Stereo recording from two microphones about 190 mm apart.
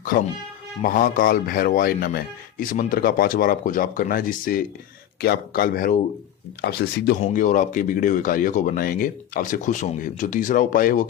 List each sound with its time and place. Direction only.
0.0 s speech: 45° left (ahead or behind)
7.2 s speech: 40° left (ahead or behind)